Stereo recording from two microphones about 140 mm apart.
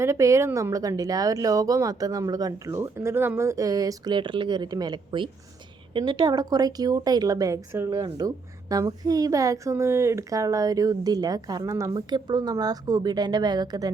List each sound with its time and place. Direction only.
0.0 s a woman's voice: 20° right (ahead or behind)